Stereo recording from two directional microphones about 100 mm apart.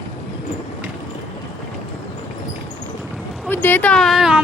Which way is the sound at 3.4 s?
20° left (ahead or behind).